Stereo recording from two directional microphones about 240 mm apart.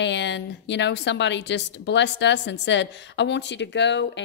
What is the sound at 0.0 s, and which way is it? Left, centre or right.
A woman's voice, left.